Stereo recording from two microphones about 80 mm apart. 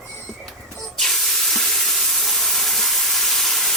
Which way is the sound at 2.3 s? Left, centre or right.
Centre.